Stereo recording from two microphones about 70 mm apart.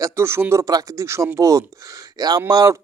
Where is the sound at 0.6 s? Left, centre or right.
Right.